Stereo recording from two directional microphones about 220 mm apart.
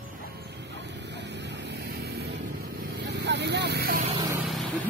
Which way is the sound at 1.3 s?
50° right (ahead or behind).